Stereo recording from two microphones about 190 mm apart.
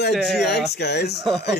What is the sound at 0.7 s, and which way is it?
Speech, 60° left (ahead or behind).